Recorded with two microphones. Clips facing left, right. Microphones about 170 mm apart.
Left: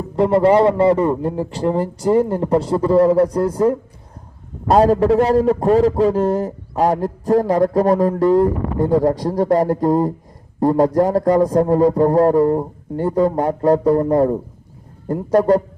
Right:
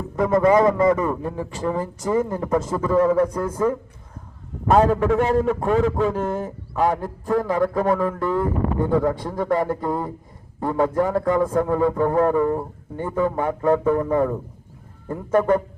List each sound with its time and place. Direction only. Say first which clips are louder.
0.2 s a man's voice: left 3 dB; 30° left (ahead or behind)